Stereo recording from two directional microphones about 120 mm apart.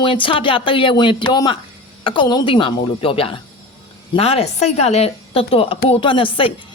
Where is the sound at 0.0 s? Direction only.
45° left (ahead or behind).